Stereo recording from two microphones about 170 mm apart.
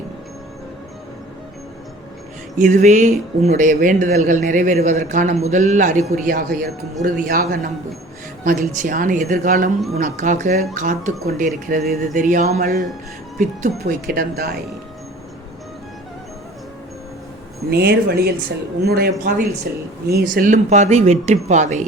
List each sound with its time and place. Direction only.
2.6 s speech: 45° right (ahead or behind); by 14.6 s 65° right (ahead or behind)
17.7 s speech: 65° right (ahead or behind); by 21.8 s 45° right (ahead or behind)